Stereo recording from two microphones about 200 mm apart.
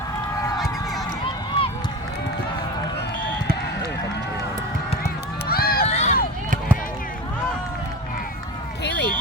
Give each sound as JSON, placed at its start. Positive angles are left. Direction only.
{"t": 5.0, "sound": "run", "side_deg": 50}
{"t": 5.8, "sound": "run", "side_deg": 35}
{"t": 8.8, "sound": "a sound", "side_deg": 60}